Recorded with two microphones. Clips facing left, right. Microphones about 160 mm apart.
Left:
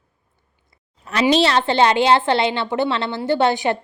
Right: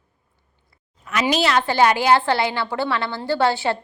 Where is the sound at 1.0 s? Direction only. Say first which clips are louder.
Left 4 dB; 30° left (ahead or behind).